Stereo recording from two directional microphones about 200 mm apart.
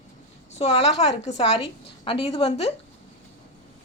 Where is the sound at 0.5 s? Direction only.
30° left (ahead or behind).